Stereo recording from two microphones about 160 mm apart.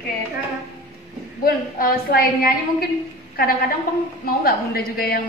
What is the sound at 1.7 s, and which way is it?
A woman's voice, 70° left (ahead or behind).